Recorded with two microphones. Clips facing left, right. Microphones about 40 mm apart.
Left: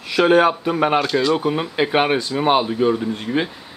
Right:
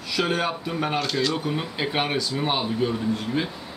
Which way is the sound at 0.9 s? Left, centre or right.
Centre.